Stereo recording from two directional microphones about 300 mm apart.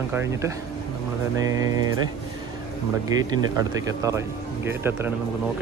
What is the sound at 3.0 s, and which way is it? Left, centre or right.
Speech, centre.